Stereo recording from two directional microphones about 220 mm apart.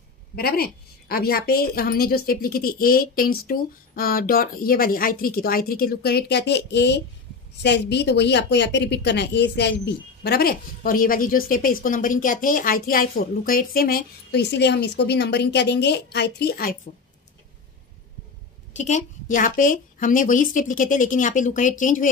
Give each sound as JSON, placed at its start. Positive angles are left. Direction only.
{"t": 0.4, "sound": "speech", "side_deg": 45}
{"t": 18.7, "sound": "a woman's voice", "side_deg": 35}